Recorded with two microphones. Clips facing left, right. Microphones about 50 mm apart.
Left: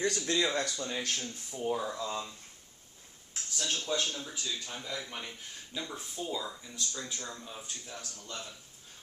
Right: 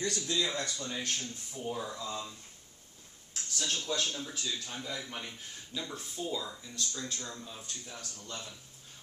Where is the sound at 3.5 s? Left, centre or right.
Centre.